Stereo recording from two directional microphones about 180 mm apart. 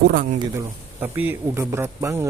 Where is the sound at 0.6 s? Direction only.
10° right (ahead or behind).